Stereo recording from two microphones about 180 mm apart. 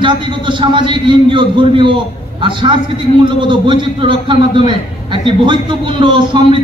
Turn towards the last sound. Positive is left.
turn(degrees=-25)  # may be behind; listen again after turning